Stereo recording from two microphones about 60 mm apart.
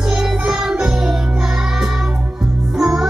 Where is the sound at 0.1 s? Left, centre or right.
Centre.